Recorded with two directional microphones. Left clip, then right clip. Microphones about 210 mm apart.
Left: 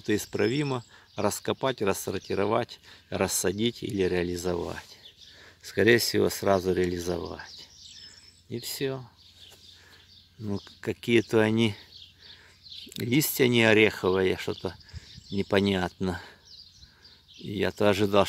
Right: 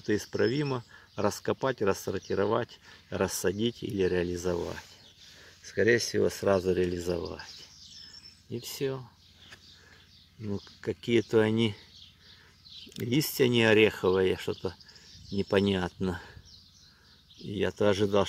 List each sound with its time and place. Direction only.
0.0 s speech: 15° left (ahead or behind)
5.6 s speech: 35° left (ahead or behind)
6.3 s speech: 15° left (ahead or behind)
10.4 s speech: 20° left (ahead or behind)
12.9 s speech: 15° left (ahead or behind)
17.5 s speech: 15° left (ahead or behind)